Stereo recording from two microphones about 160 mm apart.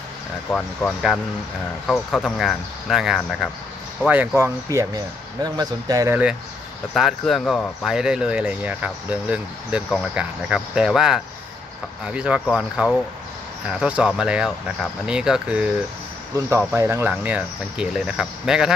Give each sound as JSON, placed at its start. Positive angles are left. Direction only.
{"t": 0.5, "sound": "speech", "side_deg": 10}
{"t": 4.6, "sound": "speech", "side_deg": -20}
{"t": 6.9, "sound": "speech", "side_deg": 0}
{"t": 16.3, "sound": "speech", "side_deg": -15}